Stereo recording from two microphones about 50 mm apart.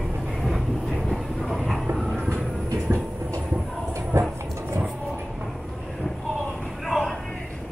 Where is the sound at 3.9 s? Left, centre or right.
Right.